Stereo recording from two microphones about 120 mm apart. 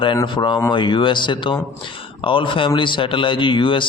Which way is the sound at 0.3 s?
40° left (ahead or behind).